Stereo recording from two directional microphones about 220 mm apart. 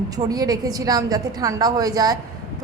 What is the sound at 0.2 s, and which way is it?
A woman's voice, 15° right (ahead or behind).